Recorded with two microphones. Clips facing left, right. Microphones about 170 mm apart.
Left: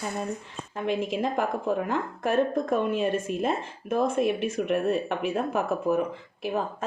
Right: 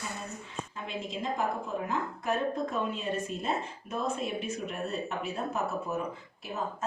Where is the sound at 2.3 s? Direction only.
55° left (ahead or behind); by 5.1 s 70° left (ahead or behind).